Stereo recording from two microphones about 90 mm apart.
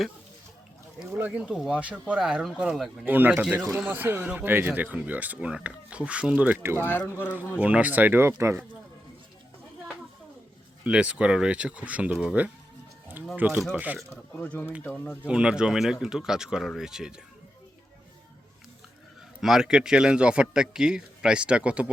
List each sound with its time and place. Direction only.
1.2 s speech: 15° right (ahead or behind)
3.1 s speech: 20° right (ahead or behind)
6.6 s speech: 25° right (ahead or behind)
6.8 s speech: 25° left (ahead or behind)
7.6 s speech: 15° right (ahead or behind)
10.8 s speech: 15° right (ahead or behind)
14.3 s speech: 15° left (ahead or behind)
15.3 s speech: 10° right (ahead or behind)
19.4 s speech: 5° right (ahead or behind)